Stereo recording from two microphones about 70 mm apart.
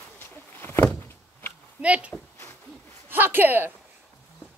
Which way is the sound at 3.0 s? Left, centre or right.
Right.